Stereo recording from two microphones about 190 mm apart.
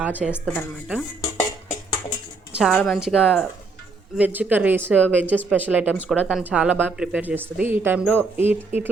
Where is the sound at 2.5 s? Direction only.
5° right (ahead or behind).